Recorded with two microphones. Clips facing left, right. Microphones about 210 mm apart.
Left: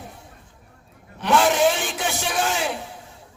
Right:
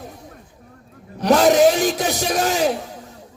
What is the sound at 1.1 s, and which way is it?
A man's voice, 40° right (ahead or behind).